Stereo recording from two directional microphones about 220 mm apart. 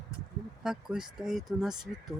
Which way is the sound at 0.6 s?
Centre (ahead or behind).